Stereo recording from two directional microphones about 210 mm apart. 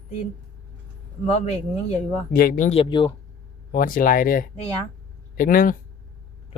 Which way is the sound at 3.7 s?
40° left (ahead or behind).